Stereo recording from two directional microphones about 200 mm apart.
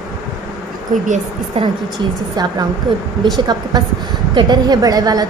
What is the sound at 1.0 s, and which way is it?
Speech, 35° right (ahead or behind).